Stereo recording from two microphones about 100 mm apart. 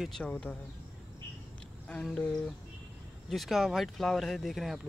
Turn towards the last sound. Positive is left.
turn(degrees=0)  # may be behind; listen again after turning